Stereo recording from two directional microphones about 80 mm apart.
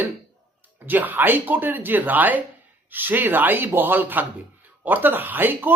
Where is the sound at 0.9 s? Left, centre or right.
Right.